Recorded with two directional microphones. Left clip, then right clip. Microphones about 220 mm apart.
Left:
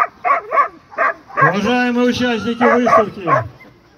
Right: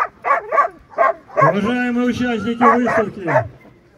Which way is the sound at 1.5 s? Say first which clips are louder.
Left 4 dB; 40° right (ahead or behind).